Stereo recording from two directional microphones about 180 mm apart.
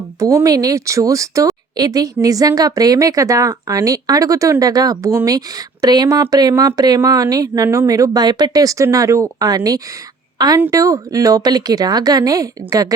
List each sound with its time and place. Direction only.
0.2 s a woman's voice: 15° right (ahead or behind)